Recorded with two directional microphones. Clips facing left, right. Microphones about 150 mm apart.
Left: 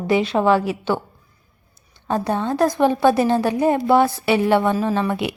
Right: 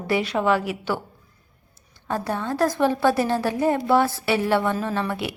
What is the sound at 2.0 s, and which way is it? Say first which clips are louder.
A woman's voice: left 5 dB; 20° left (ahead or behind).